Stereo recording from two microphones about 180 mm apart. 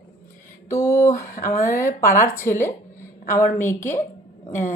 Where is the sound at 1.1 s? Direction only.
55° left (ahead or behind).